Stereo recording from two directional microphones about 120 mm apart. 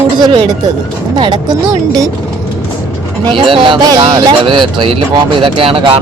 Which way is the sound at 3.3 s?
45° right (ahead or behind).